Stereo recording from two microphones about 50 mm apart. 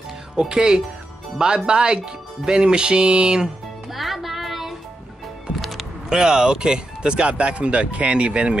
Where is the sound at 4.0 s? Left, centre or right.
Centre.